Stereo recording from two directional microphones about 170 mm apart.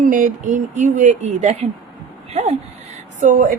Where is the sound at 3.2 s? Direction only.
50° right (ahead or behind).